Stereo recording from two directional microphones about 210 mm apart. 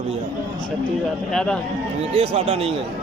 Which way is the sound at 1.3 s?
5° left (ahead or behind).